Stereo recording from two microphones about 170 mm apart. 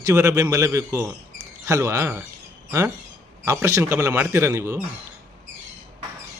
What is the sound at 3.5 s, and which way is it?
A man's voice, 15° right (ahead or behind).